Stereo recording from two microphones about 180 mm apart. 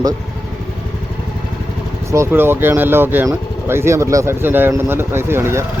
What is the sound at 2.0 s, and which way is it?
Speech, 15° right (ahead or behind).